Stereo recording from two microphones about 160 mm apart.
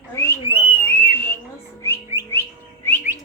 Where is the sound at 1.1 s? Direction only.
15° left (ahead or behind).